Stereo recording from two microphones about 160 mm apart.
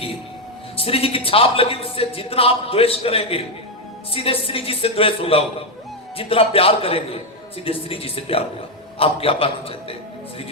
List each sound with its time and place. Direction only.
0.8 s speech: 35° left (ahead or behind)